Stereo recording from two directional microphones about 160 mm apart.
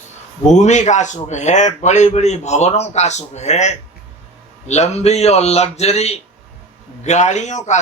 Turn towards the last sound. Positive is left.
turn(degrees=45)  # may be behind; listen again after turning